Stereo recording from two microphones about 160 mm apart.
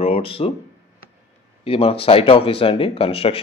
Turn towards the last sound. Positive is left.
turn(degrees=35)  # may be behind; listen again after turning